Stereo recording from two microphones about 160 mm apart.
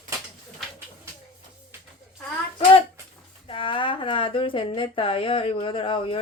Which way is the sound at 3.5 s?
30° left (ahead or behind).